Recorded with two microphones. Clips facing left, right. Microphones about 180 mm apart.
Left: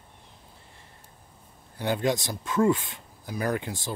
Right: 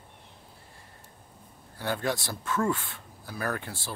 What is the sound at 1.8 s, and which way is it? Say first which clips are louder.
Speech: left 4 dB; 20° left (ahead or behind).